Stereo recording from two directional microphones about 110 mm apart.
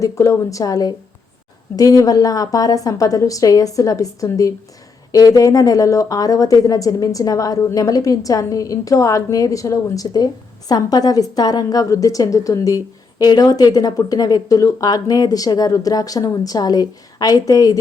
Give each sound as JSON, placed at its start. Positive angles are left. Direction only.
{"t": 0.0, "sound": "a woman's voice", "side_deg": 30}